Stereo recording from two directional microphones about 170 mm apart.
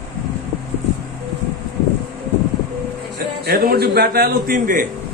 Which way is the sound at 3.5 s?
65° right (ahead or behind).